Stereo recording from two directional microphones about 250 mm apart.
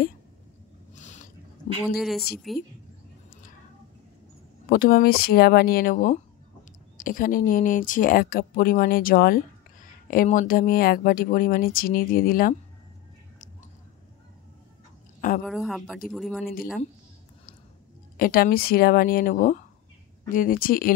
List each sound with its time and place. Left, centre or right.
0.9 s a sound: left
2.0 s a woman's voice: centre
4.6 s speech: left
15.1 s a sound: left
15.4 s a woman's voice: centre
18.1 s speech: left